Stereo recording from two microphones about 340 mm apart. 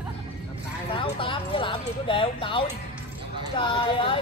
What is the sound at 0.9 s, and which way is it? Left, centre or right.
Speech, centre.